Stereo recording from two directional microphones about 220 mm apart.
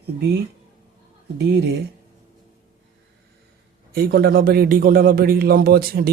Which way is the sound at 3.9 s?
45° right (ahead or behind).